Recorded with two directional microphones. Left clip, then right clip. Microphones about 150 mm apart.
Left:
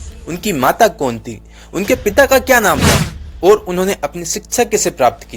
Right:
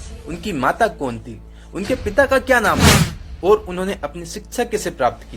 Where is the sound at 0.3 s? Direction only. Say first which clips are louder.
Left 5 dB; 50° left (ahead or behind).